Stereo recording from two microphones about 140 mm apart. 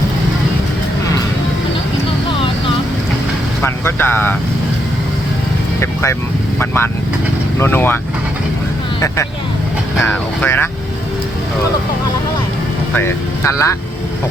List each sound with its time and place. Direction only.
3.6 s vehicle: 15° left (ahead or behind)
5.8 s vehicle: 20° left (ahead or behind)
6.6 s speech: 15° left (ahead or behind)
10.1 s speech: 15° left (ahead or behind)
12.9 s speech: 20° left (ahead or behind)